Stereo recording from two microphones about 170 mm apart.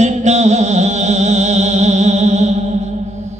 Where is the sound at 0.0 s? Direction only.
40° right (ahead or behind).